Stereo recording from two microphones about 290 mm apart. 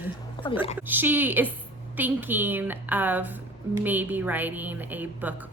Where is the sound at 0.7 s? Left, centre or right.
Centre.